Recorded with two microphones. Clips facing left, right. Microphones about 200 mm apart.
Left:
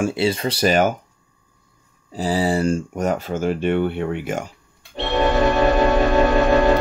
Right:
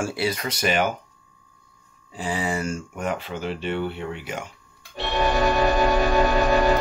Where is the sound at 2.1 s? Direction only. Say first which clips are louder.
Left 7 dB; 35° left (ahead or behind).